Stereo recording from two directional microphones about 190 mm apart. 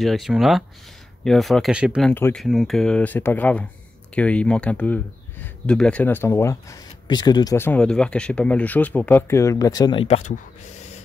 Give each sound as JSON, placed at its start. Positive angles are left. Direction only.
{"t": 0.0, "sound": "speech", "side_deg": 0}
{"t": 2.1, "sound": "speech", "side_deg": 10}
{"t": 2.4, "sound": "speech", "side_deg": 0}
{"t": 10.0, "sound": "speech", "side_deg": 35}